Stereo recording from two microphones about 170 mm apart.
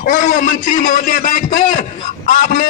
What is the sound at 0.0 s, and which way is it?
A man's voice, 50° left (ahead or behind).